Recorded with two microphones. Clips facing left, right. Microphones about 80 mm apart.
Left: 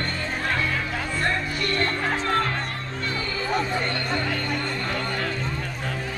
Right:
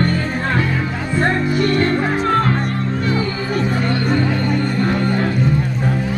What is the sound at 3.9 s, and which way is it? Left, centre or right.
Music, centre.